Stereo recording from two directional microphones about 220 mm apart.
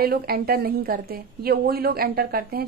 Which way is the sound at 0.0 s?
45° right (ahead or behind).